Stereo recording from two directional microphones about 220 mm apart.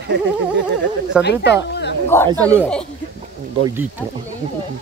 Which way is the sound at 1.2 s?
50° left (ahead or behind).